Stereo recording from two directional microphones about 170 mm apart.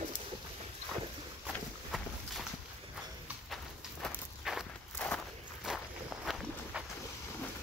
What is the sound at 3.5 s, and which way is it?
Walk, centre (ahead or behind).